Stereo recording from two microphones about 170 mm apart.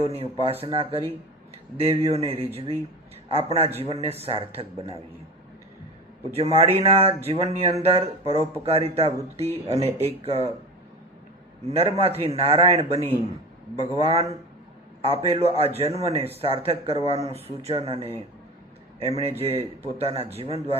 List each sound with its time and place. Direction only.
0.0 s speech: 35° right (ahead or behind)
6.3 s speech: 35° right (ahead or behind)
11.6 s speech: 40° right (ahead or behind)